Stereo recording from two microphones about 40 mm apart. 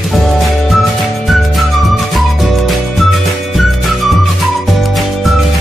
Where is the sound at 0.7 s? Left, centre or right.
Centre.